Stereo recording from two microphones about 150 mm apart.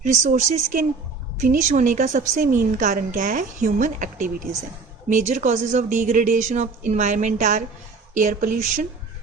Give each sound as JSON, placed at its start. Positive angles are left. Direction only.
{"t": 0.0, "sound": "a woman's voice", "side_deg": -55}